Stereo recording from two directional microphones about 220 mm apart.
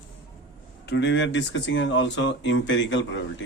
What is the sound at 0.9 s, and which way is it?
Speech, 50° left (ahead or behind).